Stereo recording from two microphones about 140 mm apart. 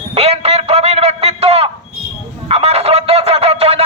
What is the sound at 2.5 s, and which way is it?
Fowl, 45° right (ahead or behind).